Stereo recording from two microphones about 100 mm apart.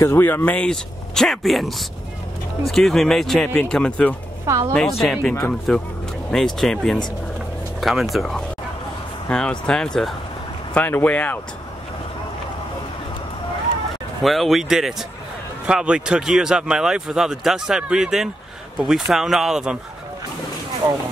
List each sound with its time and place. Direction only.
0.0 s speech: 25° left (ahead or behind)
4.5 s a woman's voice: 35° right (ahead or behind)
4.7 s speech: 5° left (ahead or behind)
10.7 s speech: 20° left (ahead or behind)
14.2 s speech: centre (ahead or behind)